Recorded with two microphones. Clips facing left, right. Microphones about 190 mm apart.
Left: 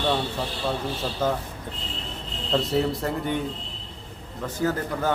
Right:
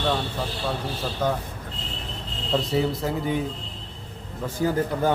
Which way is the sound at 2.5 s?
Centre (ahead or behind).